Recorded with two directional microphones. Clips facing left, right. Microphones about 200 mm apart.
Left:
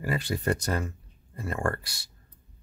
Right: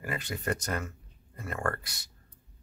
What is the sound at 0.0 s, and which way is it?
Speech, 30° left (ahead or behind).